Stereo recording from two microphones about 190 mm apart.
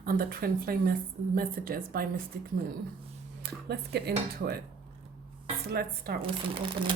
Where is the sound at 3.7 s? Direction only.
55° right (ahead or behind).